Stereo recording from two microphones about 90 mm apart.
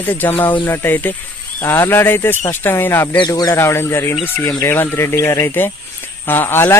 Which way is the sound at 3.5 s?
30° left (ahead or behind).